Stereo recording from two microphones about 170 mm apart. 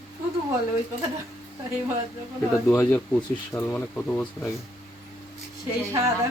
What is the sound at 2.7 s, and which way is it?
Speech, 10° left (ahead or behind).